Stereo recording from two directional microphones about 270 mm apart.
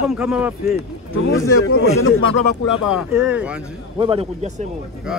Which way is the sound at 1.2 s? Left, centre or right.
Left.